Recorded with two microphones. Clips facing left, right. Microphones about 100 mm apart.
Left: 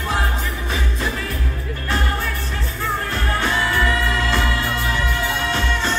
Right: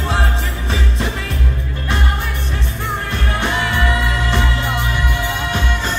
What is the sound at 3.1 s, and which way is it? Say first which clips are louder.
Music: right 3 dB; 20° right (ahead or behind).